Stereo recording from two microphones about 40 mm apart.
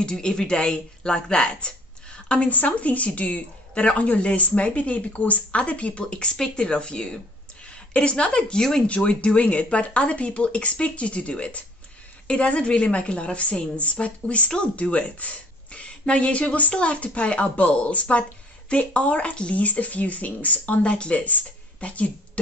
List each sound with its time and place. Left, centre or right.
0.0 s a woman's voice: centre
8.8 s a woman's voice: left